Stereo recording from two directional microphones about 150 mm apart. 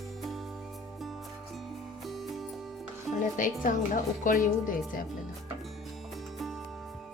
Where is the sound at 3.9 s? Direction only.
65° left (ahead or behind).